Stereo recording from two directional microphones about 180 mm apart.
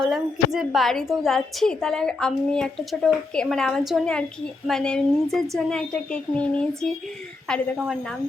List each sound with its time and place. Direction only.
0.0 s a woman's voice: centre (ahead or behind)